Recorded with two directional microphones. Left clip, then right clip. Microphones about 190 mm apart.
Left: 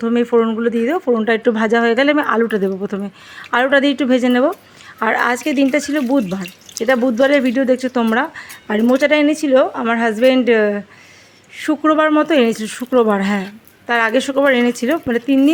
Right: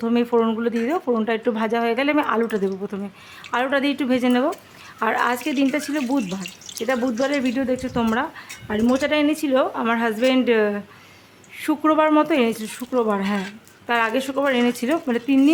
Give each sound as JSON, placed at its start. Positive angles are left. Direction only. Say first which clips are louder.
{"t": 0.0, "sound": "speech", "louder": "left 5 dB", "side_deg": 10}
{"t": 6.7, "sound": "speech", "louder": "left 8 dB", "side_deg": 20}